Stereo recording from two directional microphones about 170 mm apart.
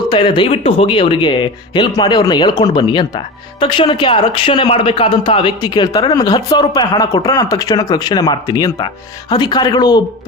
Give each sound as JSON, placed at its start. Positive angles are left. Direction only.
{"t": 0.1, "sound": "speech", "side_deg": 30}